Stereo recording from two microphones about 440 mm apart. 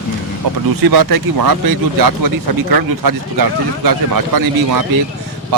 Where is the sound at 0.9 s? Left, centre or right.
Right.